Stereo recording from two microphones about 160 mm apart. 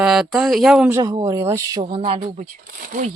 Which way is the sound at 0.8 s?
20° right (ahead or behind).